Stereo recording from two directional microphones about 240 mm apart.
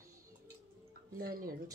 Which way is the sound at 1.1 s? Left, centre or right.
Right.